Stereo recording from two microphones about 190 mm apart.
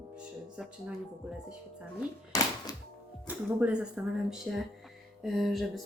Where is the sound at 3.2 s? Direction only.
10° right (ahead or behind).